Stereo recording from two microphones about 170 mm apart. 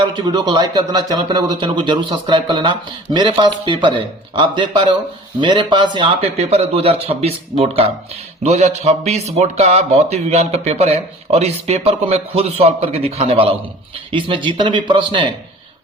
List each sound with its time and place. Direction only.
0.0 s speech: 25° right (ahead or behind)
6.3 s a man's voice: 40° right (ahead or behind)